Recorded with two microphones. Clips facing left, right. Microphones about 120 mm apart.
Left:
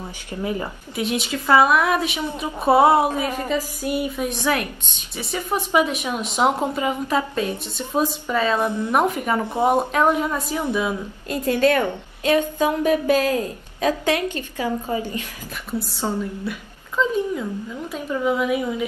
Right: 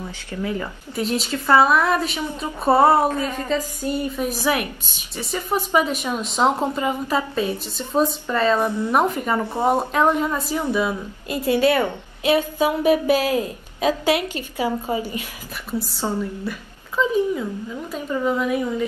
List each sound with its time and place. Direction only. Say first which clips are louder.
0.3 s speech: even; 20° left (ahead or behind)
0.9 s a woman's voice: right 1 dB; 5° left (ahead or behind)
2.9 s speech: even; 15° left (ahead or behind)
4.2 s a woman's voice: right 1 dB; 5° right (ahead or behind)
5.1 s a woman's voice: right 1 dB; centre (ahead or behind)
8.6 s speech: right 1 dB; 15° left (ahead or behind)
8.9 s a woman's voice: even; centre (ahead or behind)
9.4 s speech: left 2 dB; 15° left (ahead or behind)
9.9 s a woman's voice: even; 5° left (ahead or behind)
10.8 s a woman's voice: right 1 dB; 5° right (ahead or behind)
15.8 s a woman's voice: even; centre (ahead or behind)